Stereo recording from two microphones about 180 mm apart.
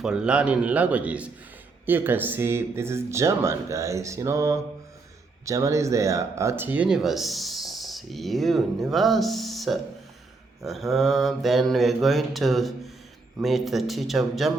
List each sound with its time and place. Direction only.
0.0 s speech: 5° right (ahead or behind)